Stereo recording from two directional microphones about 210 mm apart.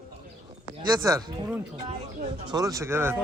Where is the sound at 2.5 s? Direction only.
15° right (ahead or behind).